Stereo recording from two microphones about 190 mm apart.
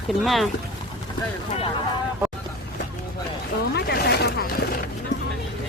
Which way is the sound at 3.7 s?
60° left (ahead or behind).